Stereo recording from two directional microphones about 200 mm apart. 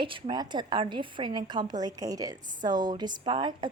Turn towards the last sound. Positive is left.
turn(degrees=-25)  # may be behind; listen again after turning